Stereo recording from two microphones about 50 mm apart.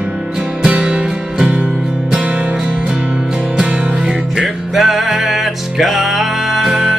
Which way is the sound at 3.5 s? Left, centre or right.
Centre.